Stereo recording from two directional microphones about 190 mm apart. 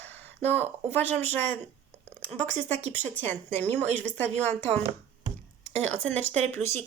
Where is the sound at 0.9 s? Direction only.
10° left (ahead or behind).